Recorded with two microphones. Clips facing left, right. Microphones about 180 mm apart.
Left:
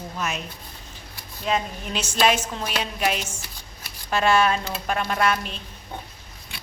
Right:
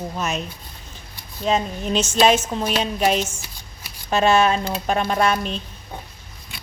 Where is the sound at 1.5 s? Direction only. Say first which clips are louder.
Right 5 dB; 25° right (ahead or behind).